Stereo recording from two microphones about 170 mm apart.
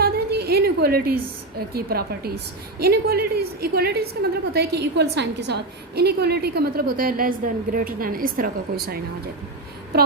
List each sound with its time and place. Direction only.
0.0 s a woman's voice: 70° right (ahead or behind)